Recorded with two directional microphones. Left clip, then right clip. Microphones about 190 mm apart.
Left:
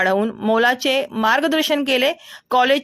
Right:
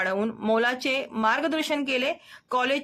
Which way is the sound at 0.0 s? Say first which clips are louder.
Left 8 dB; 35° left (ahead or behind).